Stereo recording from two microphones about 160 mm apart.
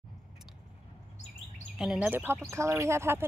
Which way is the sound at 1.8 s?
5° right (ahead or behind).